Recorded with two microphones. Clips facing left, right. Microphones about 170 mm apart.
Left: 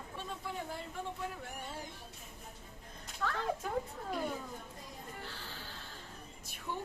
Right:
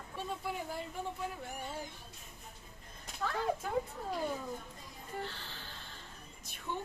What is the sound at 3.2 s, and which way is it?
Speech, 15° right (ahead or behind).